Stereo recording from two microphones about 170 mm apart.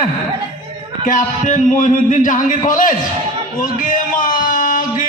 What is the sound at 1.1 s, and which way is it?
Music, 45° left (ahead or behind).